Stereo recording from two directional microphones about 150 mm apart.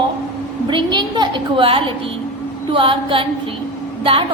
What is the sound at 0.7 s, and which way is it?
A woman's voice, 30° right (ahead or behind).